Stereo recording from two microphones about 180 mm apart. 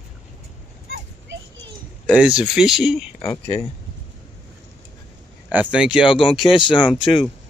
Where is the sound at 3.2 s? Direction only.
20° left (ahead or behind).